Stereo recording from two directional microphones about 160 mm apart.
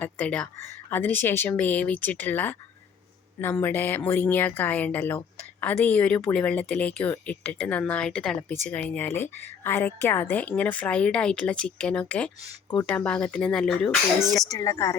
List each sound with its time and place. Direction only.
0.0 s speech: 10° left (ahead or behind)
14.4 s speech: 20° left (ahead or behind)